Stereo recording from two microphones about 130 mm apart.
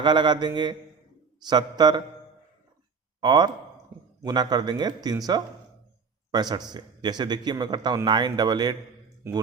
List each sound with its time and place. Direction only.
0.0 s a man's voice: 35° right (ahead or behind)
3.2 s a man's voice: 30° right (ahead or behind)
9.2 s speech: 20° right (ahead or behind)